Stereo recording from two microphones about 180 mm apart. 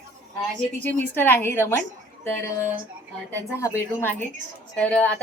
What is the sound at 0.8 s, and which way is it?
A woman's voice, 10° left (ahead or behind).